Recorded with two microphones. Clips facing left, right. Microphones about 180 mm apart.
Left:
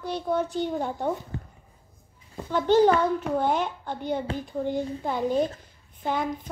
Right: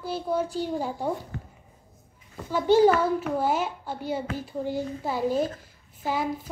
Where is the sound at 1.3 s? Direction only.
30° left (ahead or behind).